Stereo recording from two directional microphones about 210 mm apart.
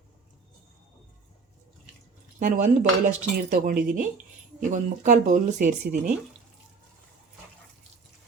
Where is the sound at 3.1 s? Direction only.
35° right (ahead or behind).